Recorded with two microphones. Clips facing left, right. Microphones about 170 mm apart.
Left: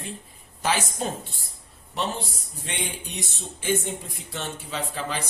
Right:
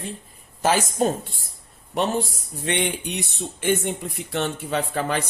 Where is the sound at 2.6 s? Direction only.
65° right (ahead or behind).